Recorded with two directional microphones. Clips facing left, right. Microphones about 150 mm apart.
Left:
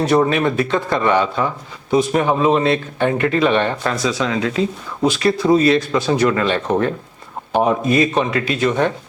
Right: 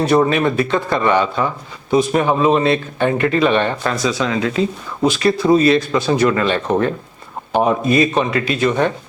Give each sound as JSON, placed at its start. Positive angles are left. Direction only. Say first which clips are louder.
{"t": 0.2, "sound": "speech", "louder": "right 1 dB", "side_deg": -10}